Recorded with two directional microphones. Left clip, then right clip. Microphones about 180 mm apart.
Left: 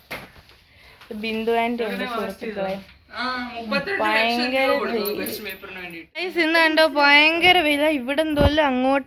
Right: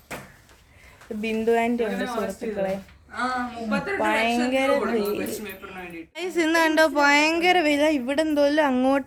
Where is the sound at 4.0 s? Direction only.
5° right (ahead or behind).